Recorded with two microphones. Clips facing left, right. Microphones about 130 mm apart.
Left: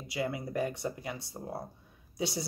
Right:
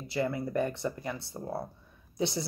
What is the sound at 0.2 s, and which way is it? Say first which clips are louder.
Speech: right 3 dB; 15° left (ahead or behind).